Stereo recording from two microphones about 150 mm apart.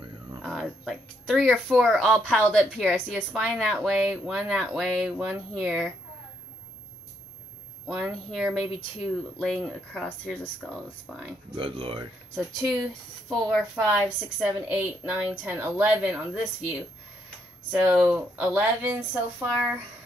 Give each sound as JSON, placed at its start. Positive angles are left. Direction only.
{"t": 0.4, "sound": "a woman's voice", "side_deg": 0}
{"t": 7.8, "sound": "speech", "side_deg": -5}
{"t": 11.5, "sound": "speech", "side_deg": -35}
{"t": 13.3, "sound": "speech", "side_deg": 0}
{"t": 13.8, "sound": "a woman's voice", "side_deg": -10}